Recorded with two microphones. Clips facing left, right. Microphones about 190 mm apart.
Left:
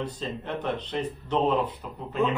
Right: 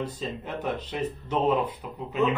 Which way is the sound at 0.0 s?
10° right (ahead or behind).